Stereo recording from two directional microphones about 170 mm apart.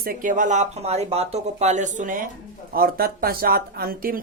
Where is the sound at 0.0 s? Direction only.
55° right (ahead or behind).